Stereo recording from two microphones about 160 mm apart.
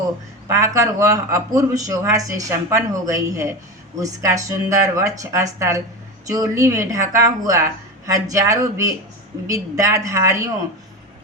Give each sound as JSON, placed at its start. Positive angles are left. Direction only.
{"t": 0.4, "sound": "a woman's voice", "side_deg": -20}